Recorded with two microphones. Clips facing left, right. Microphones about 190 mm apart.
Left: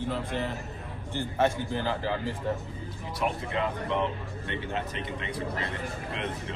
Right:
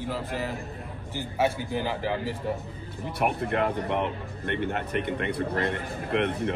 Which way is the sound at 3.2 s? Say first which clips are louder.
Right 4 dB; 60° right (ahead or behind).